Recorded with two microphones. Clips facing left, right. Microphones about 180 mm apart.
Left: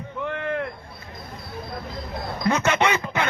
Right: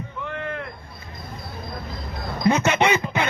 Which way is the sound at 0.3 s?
70° left (ahead or behind).